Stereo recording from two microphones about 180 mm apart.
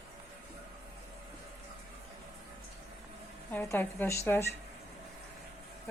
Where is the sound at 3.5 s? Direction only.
15° left (ahead or behind).